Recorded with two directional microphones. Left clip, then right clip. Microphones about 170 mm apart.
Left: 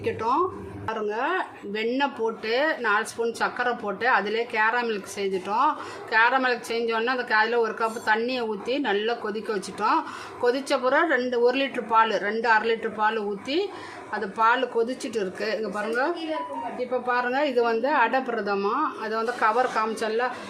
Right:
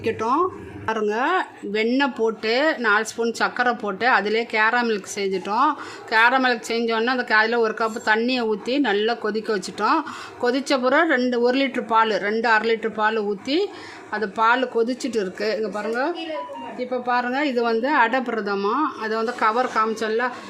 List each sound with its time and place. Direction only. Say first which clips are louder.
0.0 s speech: right 3 dB; 35° right (ahead or behind)